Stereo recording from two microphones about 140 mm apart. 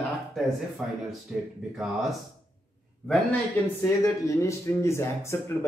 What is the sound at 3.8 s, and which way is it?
Speech, 20° left (ahead or behind).